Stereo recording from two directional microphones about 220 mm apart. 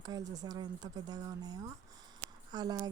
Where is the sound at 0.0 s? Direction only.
15° right (ahead or behind).